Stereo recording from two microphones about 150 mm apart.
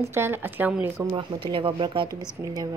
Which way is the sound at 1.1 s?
35° right (ahead or behind).